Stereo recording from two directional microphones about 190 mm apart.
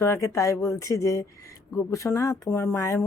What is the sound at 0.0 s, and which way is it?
Speech, 15° left (ahead or behind).